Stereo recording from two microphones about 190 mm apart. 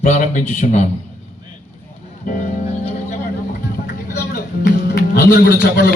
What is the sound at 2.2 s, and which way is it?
Music, 40° left (ahead or behind).